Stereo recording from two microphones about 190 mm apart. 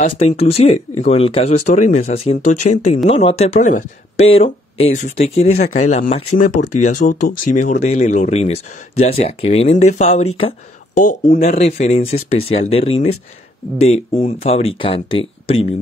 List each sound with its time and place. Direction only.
0.0 s speech: 30° left (ahead or behind)